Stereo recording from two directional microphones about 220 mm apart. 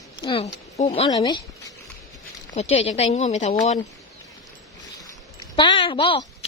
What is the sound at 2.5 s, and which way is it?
Speech, 30° left (ahead or behind).